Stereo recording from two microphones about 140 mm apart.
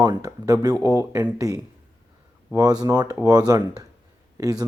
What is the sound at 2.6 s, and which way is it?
Speech, 25° right (ahead or behind).